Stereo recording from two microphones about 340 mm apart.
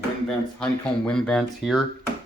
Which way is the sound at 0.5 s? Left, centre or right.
Centre.